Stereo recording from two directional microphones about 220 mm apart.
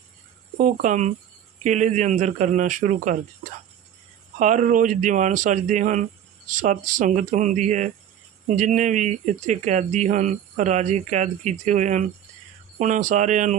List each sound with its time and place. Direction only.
0.5 s speech: 35° right (ahead or behind)
4.4 s speech: 35° right (ahead or behind)